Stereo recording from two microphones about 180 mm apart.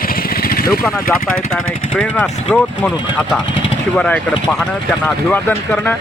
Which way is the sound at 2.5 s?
5° left (ahead or behind).